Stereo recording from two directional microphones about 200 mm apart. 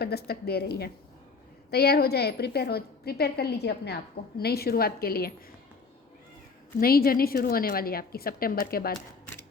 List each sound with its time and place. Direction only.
0.0 s a woman's voice: 50° left (ahead or behind)
6.7 s a woman's voice: 50° left (ahead or behind)